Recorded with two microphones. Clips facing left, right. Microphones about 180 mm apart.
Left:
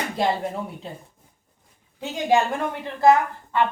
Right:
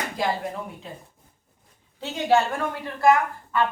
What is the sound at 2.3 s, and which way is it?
A woman's voice, 20° left (ahead or behind).